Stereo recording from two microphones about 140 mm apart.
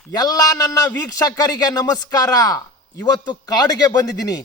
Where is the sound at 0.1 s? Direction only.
25° left (ahead or behind).